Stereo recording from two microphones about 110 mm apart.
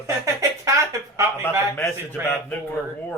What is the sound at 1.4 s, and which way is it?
A man's voice, 20° left (ahead or behind).